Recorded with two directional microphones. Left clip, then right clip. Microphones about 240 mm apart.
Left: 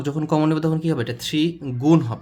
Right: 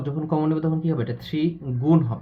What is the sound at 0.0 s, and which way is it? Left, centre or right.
Speech, left.